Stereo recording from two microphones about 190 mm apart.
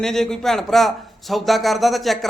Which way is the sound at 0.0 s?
Centre (ahead or behind).